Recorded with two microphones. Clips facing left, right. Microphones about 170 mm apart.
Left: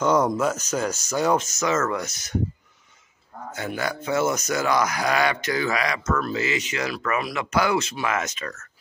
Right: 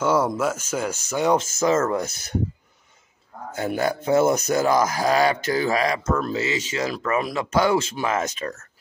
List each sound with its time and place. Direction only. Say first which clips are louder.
0.0 s speech: even; 5° right (ahead or behind)
1.6 s speech: right 3 dB; 30° right (ahead or behind)
3.5 s speech: right 5 dB; 40° right (ahead or behind)